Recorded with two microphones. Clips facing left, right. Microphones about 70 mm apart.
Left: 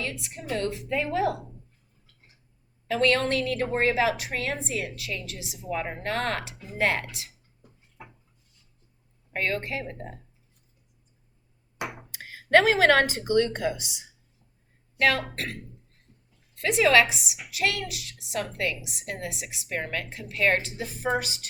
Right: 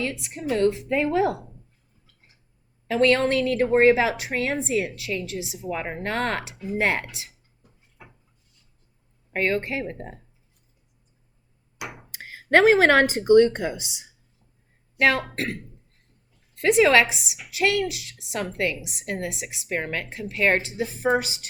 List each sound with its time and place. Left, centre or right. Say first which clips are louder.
0.0 s a woman's voice: right 6 dB; right
2.8 s a woman's voice: right 4 dB; right
9.3 s a woman's voice: right 5 dB; right
12.1 s speech: right 1 dB; right
14.9 s a woman's voice: right 3 dB; right
16.6 s a woman's voice: right 3 dB; right